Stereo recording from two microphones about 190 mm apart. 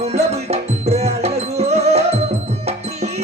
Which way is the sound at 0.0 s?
35° right (ahead or behind).